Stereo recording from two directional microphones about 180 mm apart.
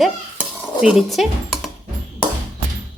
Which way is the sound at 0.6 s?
5° right (ahead or behind).